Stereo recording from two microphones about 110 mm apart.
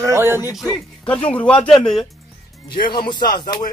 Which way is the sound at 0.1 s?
25° right (ahead or behind).